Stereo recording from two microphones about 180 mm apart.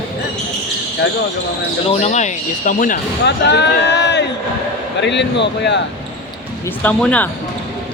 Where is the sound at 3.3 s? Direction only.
75° left (ahead or behind).